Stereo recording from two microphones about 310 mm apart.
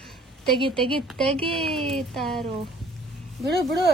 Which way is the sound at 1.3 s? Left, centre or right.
Centre.